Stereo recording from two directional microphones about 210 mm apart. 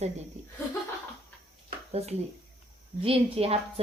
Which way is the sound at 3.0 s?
30° right (ahead or behind).